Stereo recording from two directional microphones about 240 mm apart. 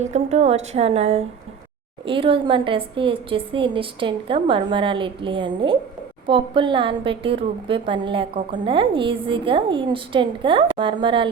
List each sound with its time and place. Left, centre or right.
0.0 s a woman's voice: right